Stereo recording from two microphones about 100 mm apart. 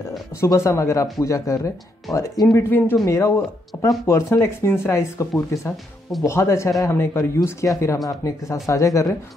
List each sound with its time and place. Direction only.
0.4 s speech: 30° left (ahead or behind)
2.5 s speech: 20° left (ahead or behind)